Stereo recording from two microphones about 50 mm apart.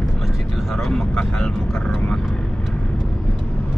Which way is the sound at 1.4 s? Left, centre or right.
Centre.